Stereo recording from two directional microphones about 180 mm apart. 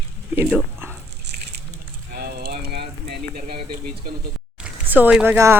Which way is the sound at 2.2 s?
60° right (ahead or behind).